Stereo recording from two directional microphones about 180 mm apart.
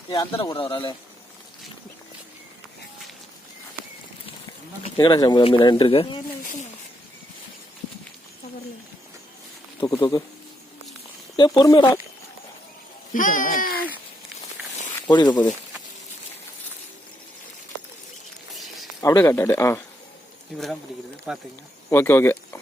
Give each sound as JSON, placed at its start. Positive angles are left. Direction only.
{"t": 0.1, "sound": "speech", "side_deg": 25}
{"t": 4.8, "sound": "speech", "side_deg": 25}
{"t": 6.4, "sound": "a sound", "side_deg": 45}
{"t": 9.8, "sound": "speech", "side_deg": 20}
{"t": 11.3, "sound": "speech", "side_deg": 25}
{"t": 13.1, "sound": "speech", "side_deg": 45}
{"t": 15.0, "sound": "speech", "side_deg": 25}
{"t": 18.5, "sound": "a sound", "side_deg": 0}
{"t": 19.0, "sound": "speech", "side_deg": 15}
{"t": 21.3, "sound": "speech", "side_deg": -5}
{"t": 21.8, "sound": "speech", "side_deg": 15}